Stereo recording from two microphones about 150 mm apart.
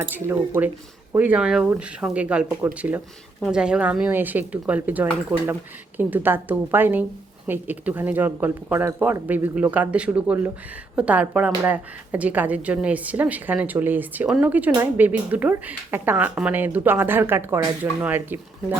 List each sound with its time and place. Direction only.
0.3 s a woman's voice: 15° right (ahead or behind)